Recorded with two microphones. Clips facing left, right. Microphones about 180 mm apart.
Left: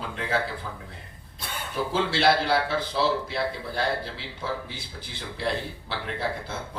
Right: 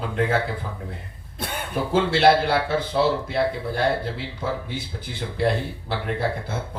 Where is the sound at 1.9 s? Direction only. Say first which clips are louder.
Right 6 dB; 55° right (ahead or behind).